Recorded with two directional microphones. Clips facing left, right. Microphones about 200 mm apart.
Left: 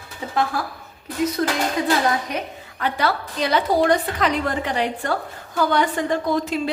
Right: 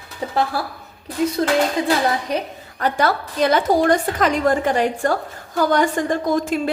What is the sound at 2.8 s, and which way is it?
A woman's voice, 45° right (ahead or behind).